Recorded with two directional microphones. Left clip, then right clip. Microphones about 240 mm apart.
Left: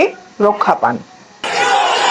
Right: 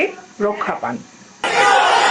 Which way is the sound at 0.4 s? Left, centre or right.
Centre.